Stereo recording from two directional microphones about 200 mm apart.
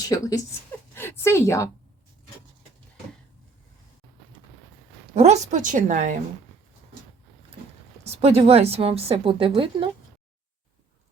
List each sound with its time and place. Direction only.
0.0 s a woman's voice: 15° left (ahead or behind)
5.1 s a woman's voice: 35° right (ahead or behind)
8.0 s a woman's voice: 30° right (ahead or behind)